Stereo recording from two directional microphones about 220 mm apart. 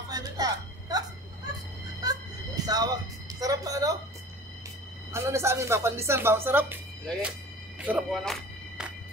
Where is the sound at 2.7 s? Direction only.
15° right (ahead or behind).